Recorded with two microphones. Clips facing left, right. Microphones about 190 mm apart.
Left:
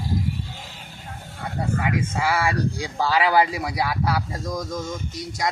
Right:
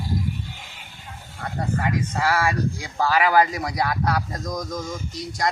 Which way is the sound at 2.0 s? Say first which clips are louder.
Right 2 dB; 10° left (ahead or behind).